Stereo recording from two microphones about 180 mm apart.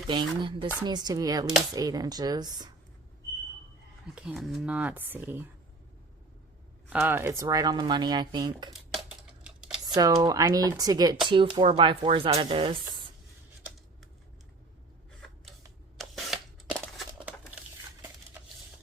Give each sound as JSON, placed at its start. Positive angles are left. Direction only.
{"t": 0.1, "sound": "speech", "side_deg": -25}
{"t": 4.1, "sound": "speech", "side_deg": -5}
{"t": 6.9, "sound": "speech", "side_deg": -10}
{"t": 8.7, "sound": "a sound", "side_deg": -5}
{"t": 9.8, "sound": "speech", "side_deg": -20}
{"t": 16.0, "sound": "camera", "side_deg": 0}
{"t": 17.0, "sound": "crumpling", "side_deg": -5}